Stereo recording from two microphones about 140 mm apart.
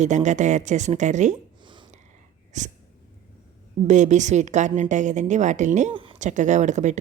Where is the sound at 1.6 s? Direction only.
35° right (ahead or behind).